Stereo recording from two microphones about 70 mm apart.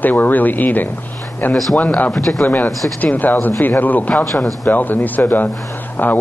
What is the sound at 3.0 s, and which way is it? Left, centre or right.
Speech, left.